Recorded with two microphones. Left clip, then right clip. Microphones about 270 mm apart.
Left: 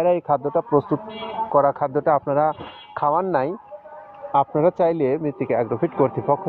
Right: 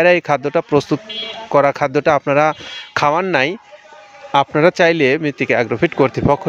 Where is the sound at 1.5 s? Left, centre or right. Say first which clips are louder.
Right 5 dB; right.